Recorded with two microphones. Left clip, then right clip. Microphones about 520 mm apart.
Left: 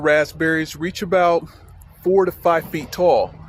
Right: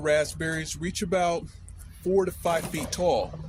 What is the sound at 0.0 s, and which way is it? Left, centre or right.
Speech, right.